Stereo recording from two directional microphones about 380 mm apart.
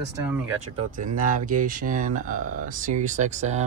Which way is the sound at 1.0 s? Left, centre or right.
Centre.